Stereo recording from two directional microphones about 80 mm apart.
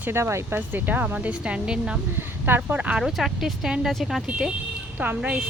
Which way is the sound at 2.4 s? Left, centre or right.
Right.